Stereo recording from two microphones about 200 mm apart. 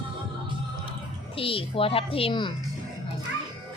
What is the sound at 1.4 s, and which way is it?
Speech, 25° left (ahead or behind).